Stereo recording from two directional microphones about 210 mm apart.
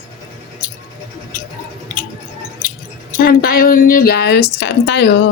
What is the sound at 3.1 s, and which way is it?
A woman's voice, 45° left (ahead or behind).